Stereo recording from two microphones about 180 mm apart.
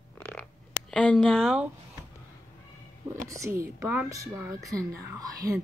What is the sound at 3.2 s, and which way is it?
Speech, 15° right (ahead or behind).